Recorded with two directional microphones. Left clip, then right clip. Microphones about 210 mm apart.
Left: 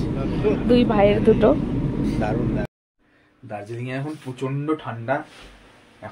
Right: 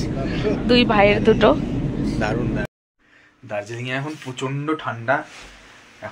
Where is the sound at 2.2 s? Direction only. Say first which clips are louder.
Right 2 dB; 35° right (ahead or behind).